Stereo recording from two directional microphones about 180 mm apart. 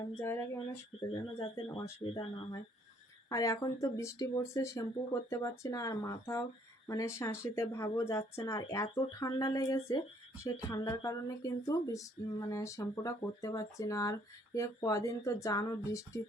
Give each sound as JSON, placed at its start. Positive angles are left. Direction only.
{"t": 0.2, "sound": "speech", "side_deg": 15}